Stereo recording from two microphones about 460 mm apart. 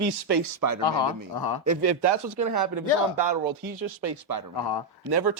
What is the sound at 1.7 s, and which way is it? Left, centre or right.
Speech, right.